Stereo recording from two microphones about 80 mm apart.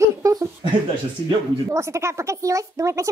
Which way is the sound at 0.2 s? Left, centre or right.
Right.